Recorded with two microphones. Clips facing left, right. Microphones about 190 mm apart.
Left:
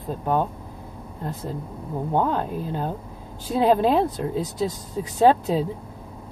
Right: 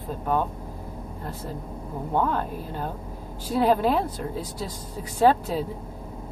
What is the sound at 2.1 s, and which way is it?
Speech, 20° left (ahead or behind).